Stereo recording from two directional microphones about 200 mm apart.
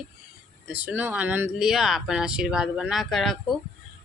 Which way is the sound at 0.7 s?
10° right (ahead or behind).